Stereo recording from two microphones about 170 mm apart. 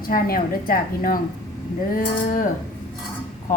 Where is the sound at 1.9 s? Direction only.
55° left (ahead or behind).